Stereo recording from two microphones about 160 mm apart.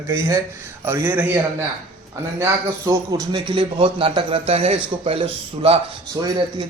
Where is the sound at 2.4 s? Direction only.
20° right (ahead or behind).